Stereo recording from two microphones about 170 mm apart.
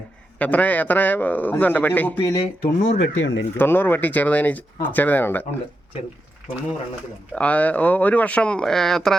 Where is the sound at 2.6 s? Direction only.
75° left (ahead or behind).